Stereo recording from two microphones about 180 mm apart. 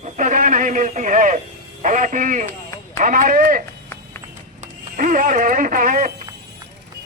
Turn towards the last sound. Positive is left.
turn(degrees=-50)  # may be behind; listen again after turning